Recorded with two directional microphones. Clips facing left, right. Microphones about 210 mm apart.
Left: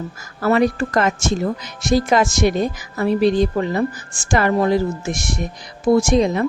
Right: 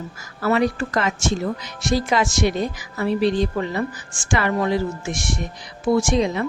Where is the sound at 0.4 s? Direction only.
45° left (ahead or behind).